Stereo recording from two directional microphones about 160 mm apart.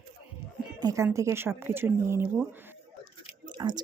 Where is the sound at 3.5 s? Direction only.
25° right (ahead or behind).